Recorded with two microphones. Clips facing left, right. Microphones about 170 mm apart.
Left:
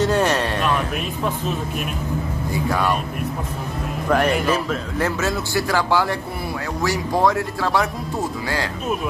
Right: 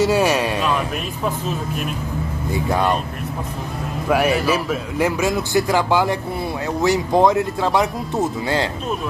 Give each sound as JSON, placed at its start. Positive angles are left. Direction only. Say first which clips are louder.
{"t": 0.0, "sound": "music", "louder": "right 2 dB", "side_deg": -10}
{"t": 2.5, "sound": "speech", "louder": "right 2 dB", "side_deg": -20}
{"t": 4.1, "sound": "a man's voice", "louder": "right 1 dB", "side_deg": -10}